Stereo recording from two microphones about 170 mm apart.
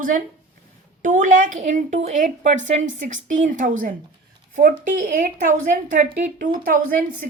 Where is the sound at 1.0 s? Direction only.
50° right (ahead or behind).